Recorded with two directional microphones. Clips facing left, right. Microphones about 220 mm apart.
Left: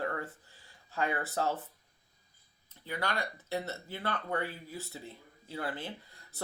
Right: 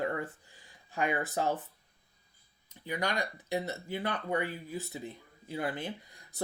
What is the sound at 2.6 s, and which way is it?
Speech, 15° right (ahead or behind).